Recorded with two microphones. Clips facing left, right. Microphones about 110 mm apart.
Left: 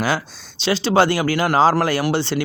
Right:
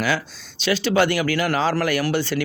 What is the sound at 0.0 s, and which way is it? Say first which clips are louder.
A woman's voice: left 2 dB; 30° left (ahead or behind).